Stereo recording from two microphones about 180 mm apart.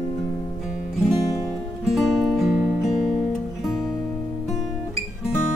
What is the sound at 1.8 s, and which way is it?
Music, centre (ahead or behind).